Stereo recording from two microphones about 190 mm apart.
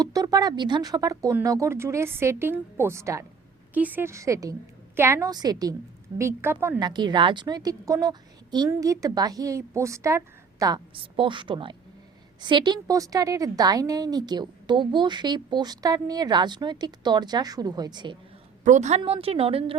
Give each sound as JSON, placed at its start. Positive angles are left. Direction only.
{"t": 0.0, "sound": "a woman's voice", "side_deg": -20}
{"t": 18.6, "sound": "a woman's voice", "side_deg": -40}